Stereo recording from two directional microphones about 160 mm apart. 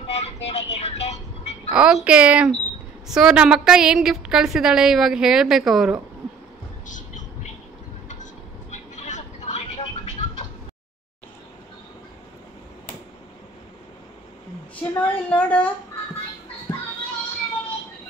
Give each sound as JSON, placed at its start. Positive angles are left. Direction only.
{"t": 0.0, "sound": "music", "side_deg": 40}
{"t": 1.7, "sound": "a child's voice", "side_deg": -5}
{"t": 8.1, "sound": "vehicle", "side_deg": 50}
{"t": 14.8, "sound": "a woman's voice", "side_deg": 10}